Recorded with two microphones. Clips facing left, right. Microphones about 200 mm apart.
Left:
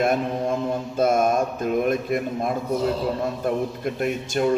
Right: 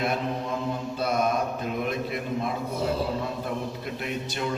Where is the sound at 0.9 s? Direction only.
45° left (ahead or behind).